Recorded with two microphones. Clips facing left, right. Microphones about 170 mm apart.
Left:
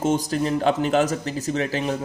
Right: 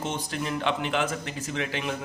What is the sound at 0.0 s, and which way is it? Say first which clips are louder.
A man's voice: left 9 dB; 40° left (ahead or behind).